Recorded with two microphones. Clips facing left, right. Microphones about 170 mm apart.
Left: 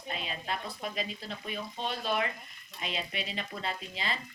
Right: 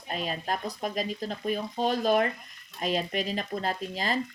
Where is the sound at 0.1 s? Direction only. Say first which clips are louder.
Right 5 dB; 45° right (ahead or behind).